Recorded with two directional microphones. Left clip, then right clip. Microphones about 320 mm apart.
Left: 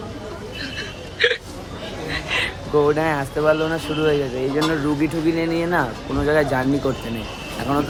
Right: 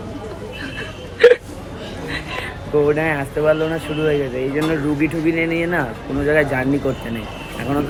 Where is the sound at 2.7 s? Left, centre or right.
Centre.